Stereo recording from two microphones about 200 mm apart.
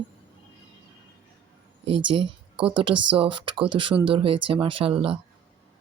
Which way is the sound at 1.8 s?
30° right (ahead or behind).